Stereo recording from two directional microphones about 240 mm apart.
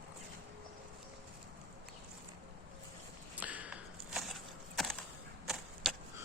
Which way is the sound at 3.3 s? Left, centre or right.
Centre.